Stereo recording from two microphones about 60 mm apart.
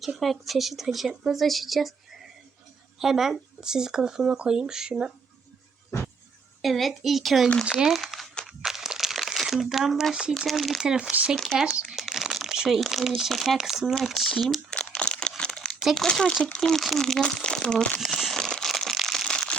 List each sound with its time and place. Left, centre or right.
0.2 s speech: centre
3.0 s speech: centre
6.6 s speech: centre
7.9 s crumpling: centre
9.7 s speech: centre
11.1 s speech: centre
14.0 s speech: centre
14.7 s crumpling: centre
15.8 s speech: centre
16.0 s speech: centre
16.6 s speech: centre
18.0 s crumpling: centre
18.7 s crushing: centre